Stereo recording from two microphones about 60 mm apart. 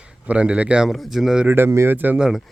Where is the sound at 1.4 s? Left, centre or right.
Right.